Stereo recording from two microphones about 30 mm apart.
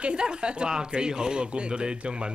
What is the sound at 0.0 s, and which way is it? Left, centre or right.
Speech, right.